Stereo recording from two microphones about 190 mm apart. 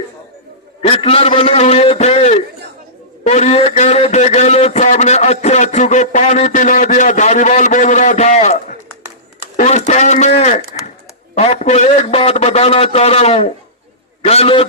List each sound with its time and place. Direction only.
0.8 s speech: 30° left (ahead or behind)
9.6 s speech: 40° left (ahead or behind)